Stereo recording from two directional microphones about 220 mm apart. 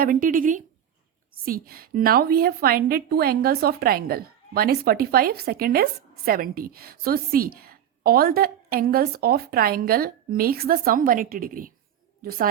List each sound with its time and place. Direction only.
0.0 s a woman's voice: 40° right (ahead or behind)